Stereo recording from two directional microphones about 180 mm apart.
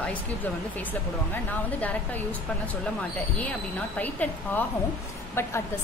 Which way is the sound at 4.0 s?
10° left (ahead or behind).